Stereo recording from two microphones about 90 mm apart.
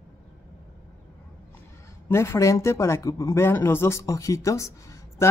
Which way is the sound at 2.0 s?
30° left (ahead or behind).